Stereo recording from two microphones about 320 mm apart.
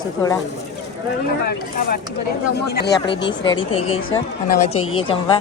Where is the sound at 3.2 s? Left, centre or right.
Centre.